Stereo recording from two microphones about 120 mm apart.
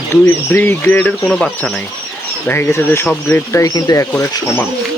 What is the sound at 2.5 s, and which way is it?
Speech, 20° left (ahead or behind).